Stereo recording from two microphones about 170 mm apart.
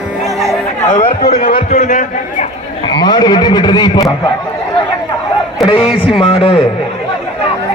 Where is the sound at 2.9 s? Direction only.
25° left (ahead or behind).